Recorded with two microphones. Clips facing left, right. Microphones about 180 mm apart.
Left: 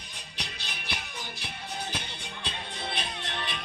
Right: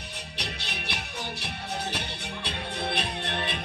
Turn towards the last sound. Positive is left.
turn(degrees=-60)  # may be behind; listen again after turning